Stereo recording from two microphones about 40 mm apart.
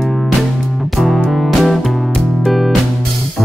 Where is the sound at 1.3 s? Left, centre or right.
Centre.